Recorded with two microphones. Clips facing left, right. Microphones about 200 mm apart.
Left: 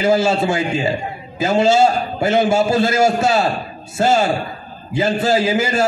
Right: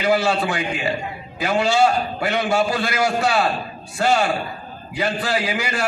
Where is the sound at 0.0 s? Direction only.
25° left (ahead or behind).